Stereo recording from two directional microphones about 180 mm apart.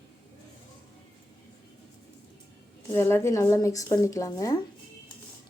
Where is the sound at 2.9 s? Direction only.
15° left (ahead or behind).